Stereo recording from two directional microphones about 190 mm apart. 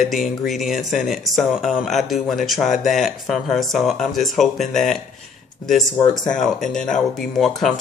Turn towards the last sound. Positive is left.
turn(degrees=0)  # may be behind; listen again after turning